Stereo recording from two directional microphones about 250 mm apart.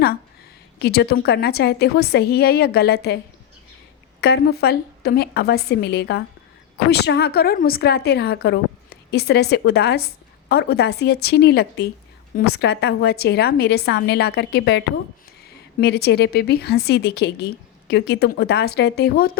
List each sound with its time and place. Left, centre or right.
0.8 s a woman's voice: left
4.2 s a woman's voice: left